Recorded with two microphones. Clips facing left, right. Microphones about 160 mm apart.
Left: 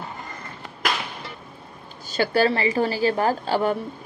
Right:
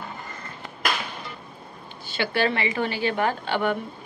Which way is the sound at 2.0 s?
40° left (ahead or behind).